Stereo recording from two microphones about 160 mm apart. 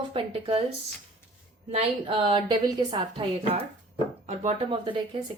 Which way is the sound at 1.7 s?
35° right (ahead or behind).